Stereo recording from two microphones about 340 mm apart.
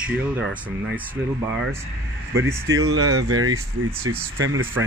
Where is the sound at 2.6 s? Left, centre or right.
Right.